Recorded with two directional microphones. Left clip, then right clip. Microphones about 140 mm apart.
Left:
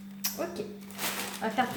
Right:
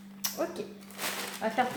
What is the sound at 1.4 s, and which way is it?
Speech, 20° right (ahead or behind).